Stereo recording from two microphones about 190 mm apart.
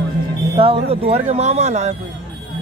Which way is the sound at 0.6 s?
30° right (ahead or behind).